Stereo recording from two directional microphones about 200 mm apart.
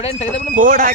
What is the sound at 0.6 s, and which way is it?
Speech, 40° right (ahead or behind).